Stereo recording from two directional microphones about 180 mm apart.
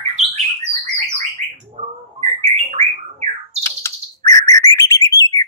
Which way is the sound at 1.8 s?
30° right (ahead or behind).